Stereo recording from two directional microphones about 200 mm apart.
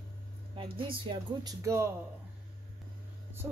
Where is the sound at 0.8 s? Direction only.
25° right (ahead or behind).